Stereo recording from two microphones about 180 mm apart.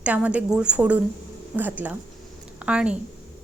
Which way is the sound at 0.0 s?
5° right (ahead or behind).